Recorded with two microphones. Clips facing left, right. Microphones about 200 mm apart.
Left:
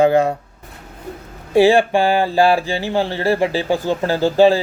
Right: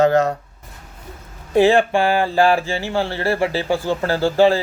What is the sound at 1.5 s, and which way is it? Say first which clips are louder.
Speech: left 2 dB; 10° left (ahead or behind).